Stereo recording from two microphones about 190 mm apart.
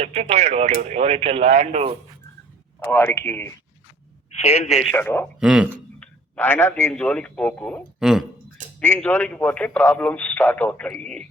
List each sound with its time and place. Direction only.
0.0 s speech: 30° right (ahead or behind)
2.8 s speech: 10° left (ahead or behind)
4.4 s a man's voice: 35° left (ahead or behind)
4.8 s speech: 5° left (ahead or behind)
5.4 s speech: 5° right (ahead or behind)
6.3 s speech: 10° left (ahead or behind)
8.8 s speech: 10° left (ahead or behind)